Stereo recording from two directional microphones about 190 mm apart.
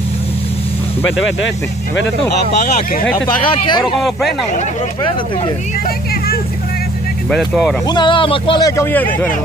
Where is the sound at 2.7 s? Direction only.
45° left (ahead or behind).